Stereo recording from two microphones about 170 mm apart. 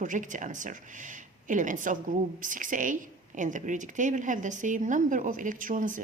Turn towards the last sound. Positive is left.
turn(degrees=-50)  # may be behind; listen again after turning